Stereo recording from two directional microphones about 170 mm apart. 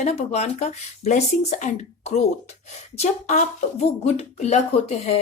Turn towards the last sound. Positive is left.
turn(degrees=35)  # may be behind; listen again after turning